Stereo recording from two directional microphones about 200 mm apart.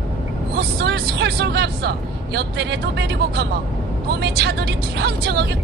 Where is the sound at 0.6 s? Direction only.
55° right (ahead or behind).